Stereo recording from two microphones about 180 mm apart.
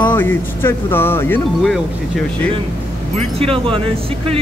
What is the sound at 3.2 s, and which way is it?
Speech, 30° right (ahead or behind).